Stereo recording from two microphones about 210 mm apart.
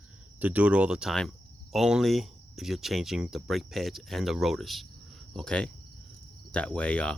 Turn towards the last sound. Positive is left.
turn(degrees=5)  # may be behind; listen again after turning